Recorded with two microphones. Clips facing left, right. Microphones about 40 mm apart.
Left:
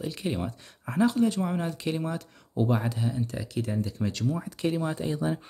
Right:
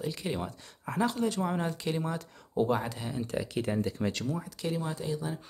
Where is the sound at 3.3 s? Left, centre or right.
Right.